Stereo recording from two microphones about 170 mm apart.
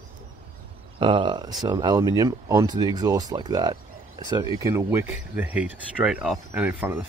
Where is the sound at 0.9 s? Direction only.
30° right (ahead or behind).